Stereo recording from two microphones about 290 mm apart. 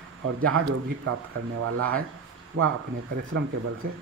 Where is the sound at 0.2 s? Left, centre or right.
Right.